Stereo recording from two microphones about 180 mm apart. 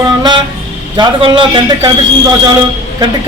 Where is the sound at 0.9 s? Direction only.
25° right (ahead or behind).